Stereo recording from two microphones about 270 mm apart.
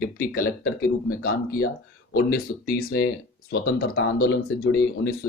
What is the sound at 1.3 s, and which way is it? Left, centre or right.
Speech, left.